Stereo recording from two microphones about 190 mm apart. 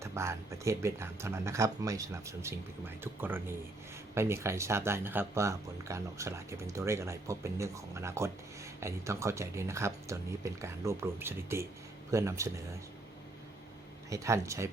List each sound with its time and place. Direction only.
0.0 s speech: 15° right (ahead or behind)
14.1 s speech: 15° right (ahead or behind)